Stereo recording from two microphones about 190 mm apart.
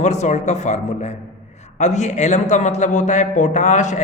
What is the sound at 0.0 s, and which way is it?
A man's voice, 35° left (ahead or behind).